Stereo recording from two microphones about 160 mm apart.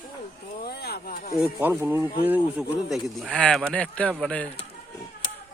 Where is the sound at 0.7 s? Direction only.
85° left; by 1.3 s 65° left (ahead or behind).